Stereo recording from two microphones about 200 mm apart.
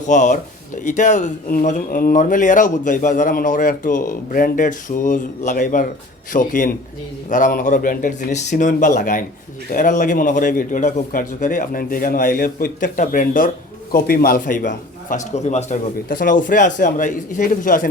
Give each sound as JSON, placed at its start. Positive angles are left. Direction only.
{"t": 0.1, "sound": "a man's voice", "side_deg": 35}